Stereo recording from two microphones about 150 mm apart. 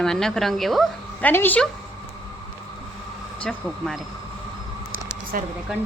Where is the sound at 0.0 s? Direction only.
5° left (ahead or behind).